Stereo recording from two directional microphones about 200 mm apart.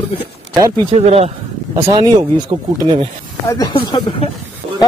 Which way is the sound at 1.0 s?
30° right (ahead or behind).